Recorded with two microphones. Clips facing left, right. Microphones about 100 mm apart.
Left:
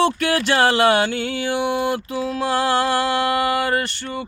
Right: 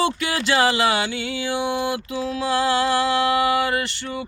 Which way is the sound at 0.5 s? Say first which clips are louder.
Left 3 dB; 50° left (ahead or behind).